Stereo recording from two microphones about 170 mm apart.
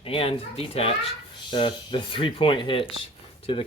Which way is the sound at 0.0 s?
30° left (ahead or behind).